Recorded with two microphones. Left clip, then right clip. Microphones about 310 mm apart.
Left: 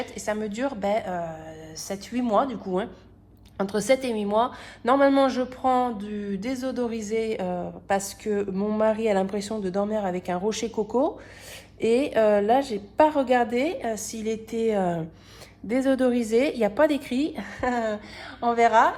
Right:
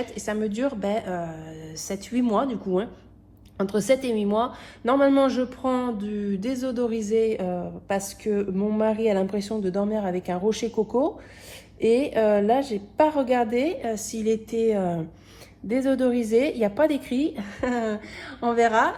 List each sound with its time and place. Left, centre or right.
0.0 s a woman's voice: left